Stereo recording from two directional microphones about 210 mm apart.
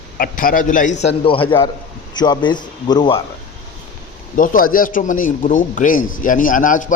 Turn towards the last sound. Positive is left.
turn(degrees=40)  # may be behind; listen again after turning